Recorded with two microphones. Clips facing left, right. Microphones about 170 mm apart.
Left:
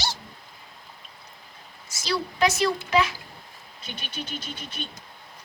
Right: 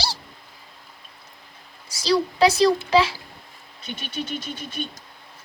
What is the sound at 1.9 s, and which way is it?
A woman's voice, 35° right (ahead or behind).